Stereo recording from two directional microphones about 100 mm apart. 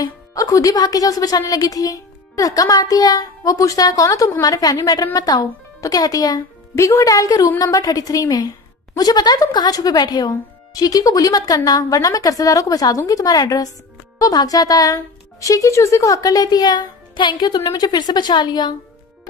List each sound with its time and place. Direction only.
0.0 s a child's voice: 35° left (ahead or behind)